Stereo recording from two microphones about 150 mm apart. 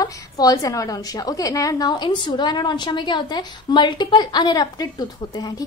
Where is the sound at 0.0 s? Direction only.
25° left (ahead or behind).